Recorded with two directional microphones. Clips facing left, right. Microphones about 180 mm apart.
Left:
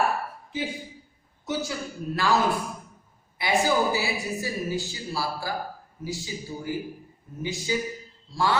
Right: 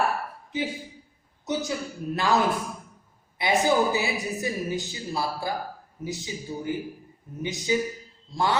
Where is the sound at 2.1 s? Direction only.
20° right (ahead or behind).